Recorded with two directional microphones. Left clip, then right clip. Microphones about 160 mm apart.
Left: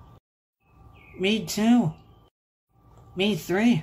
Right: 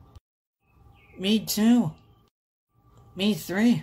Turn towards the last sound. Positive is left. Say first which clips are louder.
# left 1 dB
turn(degrees=-30)  # may be behind; listen again after turning